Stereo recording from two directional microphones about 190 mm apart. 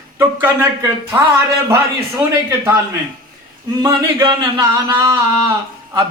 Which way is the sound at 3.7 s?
20° right (ahead or behind).